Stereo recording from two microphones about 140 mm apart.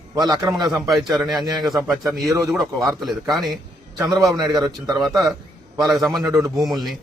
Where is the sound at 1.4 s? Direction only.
30° right (ahead or behind).